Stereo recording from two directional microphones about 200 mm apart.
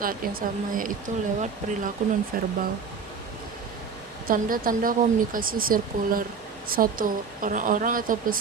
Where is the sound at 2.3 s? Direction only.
45° right (ahead or behind).